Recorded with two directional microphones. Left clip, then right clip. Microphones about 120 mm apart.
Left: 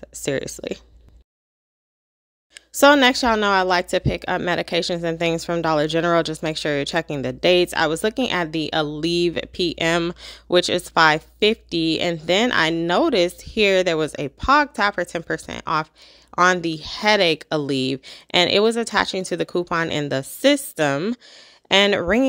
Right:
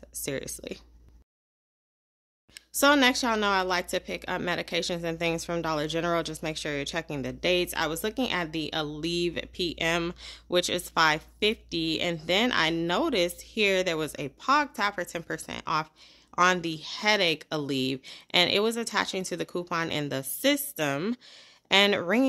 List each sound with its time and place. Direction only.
0.0 s speech: 50° left (ahead or behind)
2.5 s speech: 40° left (ahead or behind)